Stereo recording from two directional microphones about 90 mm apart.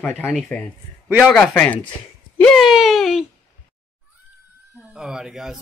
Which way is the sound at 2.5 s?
Centre (ahead or behind).